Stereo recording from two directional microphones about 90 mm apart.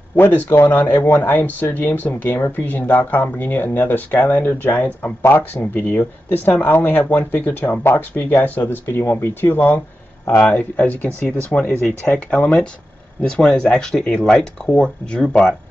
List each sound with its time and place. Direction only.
0.1 s speech: 20° left (ahead or behind)